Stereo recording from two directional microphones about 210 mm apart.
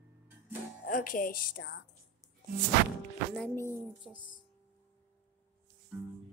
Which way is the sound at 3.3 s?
10° left (ahead or behind).